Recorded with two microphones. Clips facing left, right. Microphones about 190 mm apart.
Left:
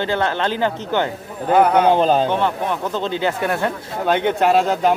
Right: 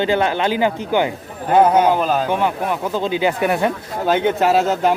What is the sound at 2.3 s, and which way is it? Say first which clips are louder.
Speech: right 1 dB; 10° right (ahead or behind).